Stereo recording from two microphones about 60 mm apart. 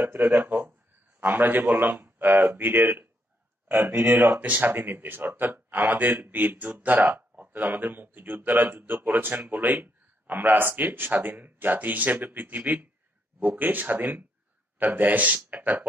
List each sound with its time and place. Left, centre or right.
0.3 s a man's voice: right